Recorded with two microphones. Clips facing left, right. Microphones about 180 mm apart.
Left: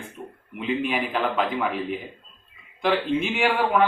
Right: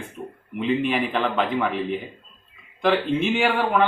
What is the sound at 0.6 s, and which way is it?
A man's voice, centre (ahead or behind).